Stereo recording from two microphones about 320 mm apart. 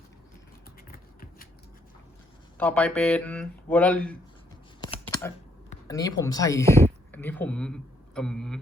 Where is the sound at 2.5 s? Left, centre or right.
Centre.